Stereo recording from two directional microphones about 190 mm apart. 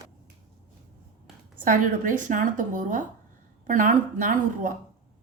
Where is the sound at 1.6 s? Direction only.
45° right (ahead or behind).